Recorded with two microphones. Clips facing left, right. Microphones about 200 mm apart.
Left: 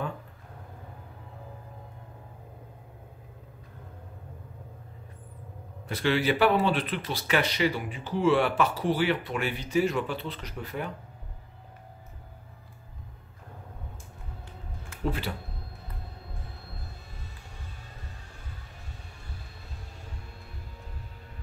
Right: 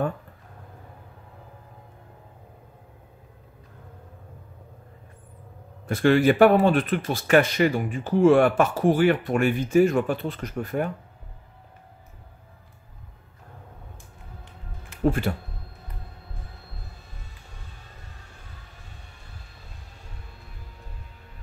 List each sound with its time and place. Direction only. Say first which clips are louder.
5.9 s speech: right 7 dB; 50° right (ahead or behind)
15.0 s speech: right 8 dB; 50° right (ahead or behind)